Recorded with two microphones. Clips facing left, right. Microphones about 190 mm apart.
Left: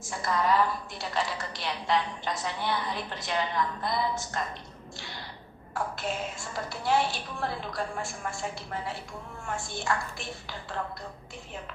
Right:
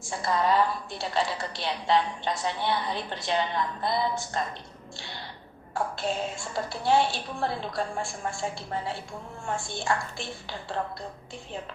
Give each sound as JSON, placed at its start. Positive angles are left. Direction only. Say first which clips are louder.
{"t": 0.0, "sound": "a woman's voice", "louder": "right 2 dB", "side_deg": -30}
{"t": 5.7, "sound": "a woman's voice", "louder": "right 3 dB", "side_deg": -30}